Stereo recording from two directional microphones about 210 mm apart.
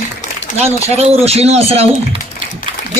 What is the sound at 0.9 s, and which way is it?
Speech, 30° right (ahead or behind).